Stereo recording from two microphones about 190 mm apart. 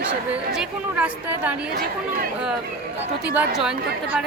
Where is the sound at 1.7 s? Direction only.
50° right (ahead or behind).